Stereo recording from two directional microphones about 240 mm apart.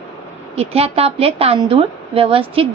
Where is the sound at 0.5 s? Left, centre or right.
Right.